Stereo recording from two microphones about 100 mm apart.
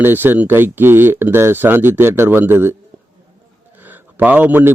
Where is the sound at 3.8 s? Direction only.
20° right (ahead or behind).